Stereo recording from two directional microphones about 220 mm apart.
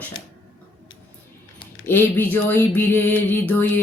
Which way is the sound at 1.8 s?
10° left (ahead or behind).